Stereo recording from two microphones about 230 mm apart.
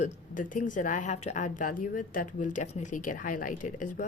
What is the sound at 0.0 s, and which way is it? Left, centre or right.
Speech, left.